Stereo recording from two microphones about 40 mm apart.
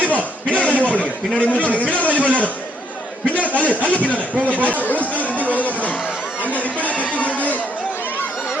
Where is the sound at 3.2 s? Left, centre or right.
Left.